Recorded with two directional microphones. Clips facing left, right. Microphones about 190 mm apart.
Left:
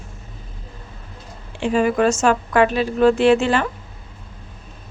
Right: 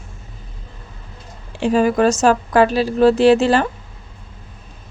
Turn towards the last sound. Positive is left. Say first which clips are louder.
# right 3 dB
turn(degrees=-35)  # may be behind; listen again after turning